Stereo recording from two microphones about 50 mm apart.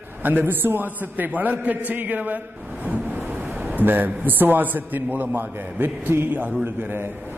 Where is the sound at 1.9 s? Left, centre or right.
Right.